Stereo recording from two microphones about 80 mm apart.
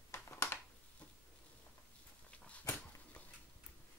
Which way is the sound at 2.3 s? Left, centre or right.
Centre.